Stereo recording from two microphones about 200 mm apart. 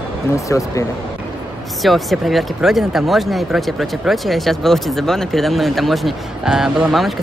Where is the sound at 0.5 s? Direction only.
15° left (ahead or behind).